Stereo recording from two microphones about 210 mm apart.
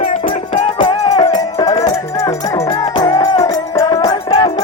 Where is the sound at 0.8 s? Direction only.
20° left (ahead or behind).